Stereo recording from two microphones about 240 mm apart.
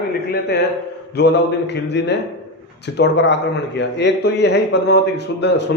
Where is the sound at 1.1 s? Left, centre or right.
Left.